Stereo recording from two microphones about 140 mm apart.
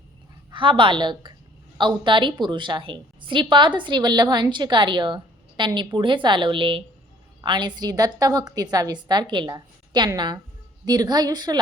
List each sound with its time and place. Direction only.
0.5 s a woman's voice: 35° right (ahead or behind)